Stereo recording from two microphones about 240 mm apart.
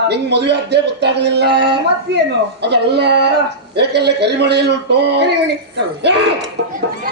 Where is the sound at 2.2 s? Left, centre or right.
Right.